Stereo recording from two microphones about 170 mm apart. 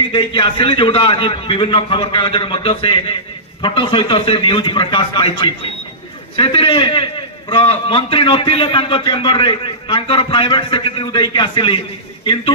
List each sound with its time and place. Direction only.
0.1 s a man's voice: 30° left (ahead or behind)